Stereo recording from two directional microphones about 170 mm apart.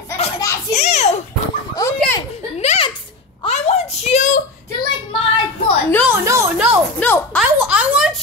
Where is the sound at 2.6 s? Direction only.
35° left (ahead or behind).